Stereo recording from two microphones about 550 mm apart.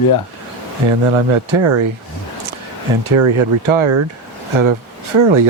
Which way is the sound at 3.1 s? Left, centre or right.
Right.